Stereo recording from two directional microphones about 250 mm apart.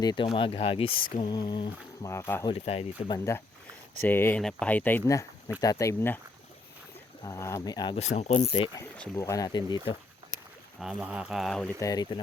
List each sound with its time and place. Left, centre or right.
0.0 s speech: centre
2.5 s speech: left
4.0 s speech: centre
7.3 s speech: centre
10.8 s speech: centre
11.9 s speech: centre